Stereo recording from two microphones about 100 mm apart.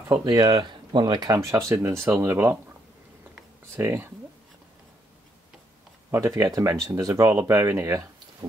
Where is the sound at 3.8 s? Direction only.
25° right (ahead or behind).